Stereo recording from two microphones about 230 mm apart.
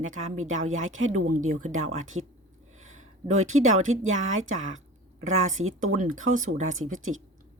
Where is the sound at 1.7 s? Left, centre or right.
Right.